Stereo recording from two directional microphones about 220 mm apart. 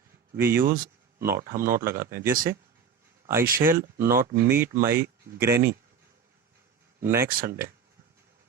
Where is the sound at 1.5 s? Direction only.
40° right (ahead or behind).